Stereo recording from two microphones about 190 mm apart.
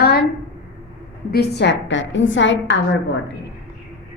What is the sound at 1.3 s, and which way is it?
A woman's voice, 60° left (ahead or behind).